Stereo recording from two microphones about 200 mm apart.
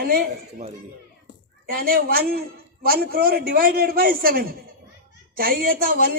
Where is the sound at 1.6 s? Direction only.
50° right (ahead or behind).